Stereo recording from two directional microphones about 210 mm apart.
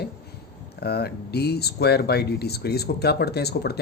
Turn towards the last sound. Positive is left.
turn(degrees=50)  # may be behind; listen again after turning